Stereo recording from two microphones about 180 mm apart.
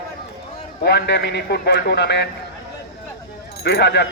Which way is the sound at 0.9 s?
70° left (ahead or behind).